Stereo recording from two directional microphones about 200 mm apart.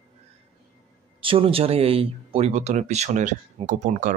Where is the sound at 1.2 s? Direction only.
25° right (ahead or behind).